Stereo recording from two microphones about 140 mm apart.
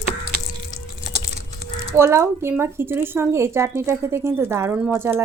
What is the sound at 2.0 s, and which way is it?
Speech, 20° right (ahead or behind).